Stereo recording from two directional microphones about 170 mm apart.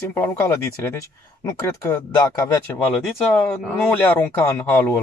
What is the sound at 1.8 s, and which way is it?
Speech, 20° left (ahead or behind).